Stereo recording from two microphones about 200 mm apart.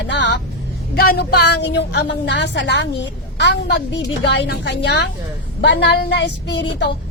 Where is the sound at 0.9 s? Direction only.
50° left (ahead or behind).